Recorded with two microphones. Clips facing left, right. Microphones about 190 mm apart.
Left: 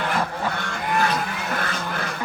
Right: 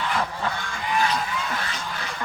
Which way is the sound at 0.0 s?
60° left (ahead or behind).